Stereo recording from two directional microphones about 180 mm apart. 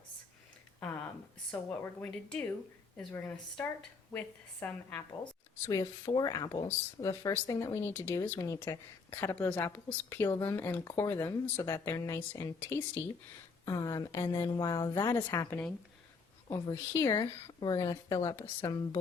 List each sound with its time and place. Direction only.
0.8 s a sound: 10° left (ahead or behind)
1.5 s a woman's voice: 5° left (ahead or behind)
13.7 s a woman's voice: 20° left (ahead or behind)